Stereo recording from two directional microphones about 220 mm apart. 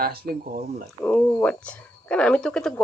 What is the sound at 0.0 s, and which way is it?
Speech, 45° right (ahead or behind).